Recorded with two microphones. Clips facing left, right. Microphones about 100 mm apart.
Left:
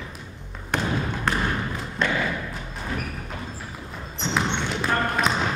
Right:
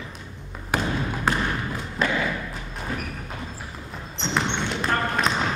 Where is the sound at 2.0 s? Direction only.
5° right (ahead or behind).